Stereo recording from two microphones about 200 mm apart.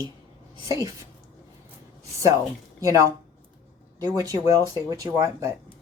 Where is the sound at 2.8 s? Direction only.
15° right (ahead or behind).